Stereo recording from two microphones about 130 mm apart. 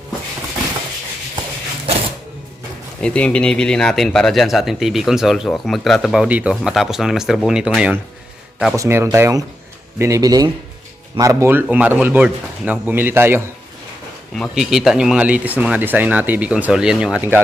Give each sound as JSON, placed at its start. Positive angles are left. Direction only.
{"t": 3.0, "sound": "speech", "side_deg": 10}
{"t": 8.7, "sound": "speech", "side_deg": -20}
{"t": 14.5, "sound": "speech", "side_deg": -5}